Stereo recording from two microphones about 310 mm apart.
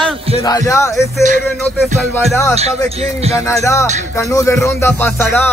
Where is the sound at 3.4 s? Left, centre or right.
Centre.